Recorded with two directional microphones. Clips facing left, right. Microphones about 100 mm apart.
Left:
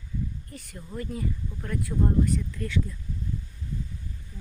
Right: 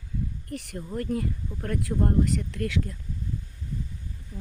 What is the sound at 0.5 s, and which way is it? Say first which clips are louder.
Speech: right 5 dB; 70° right (ahead or behind).